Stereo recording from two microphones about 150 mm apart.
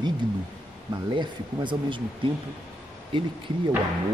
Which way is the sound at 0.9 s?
30° right (ahead or behind).